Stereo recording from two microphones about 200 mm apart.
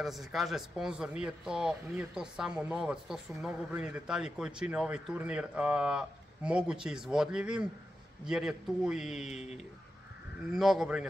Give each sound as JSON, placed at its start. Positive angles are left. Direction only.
{"t": 0.0, "sound": "speech", "side_deg": 0}
{"t": 9.3, "sound": "speech", "side_deg": 35}
{"t": 10.5, "sound": "speech", "side_deg": 0}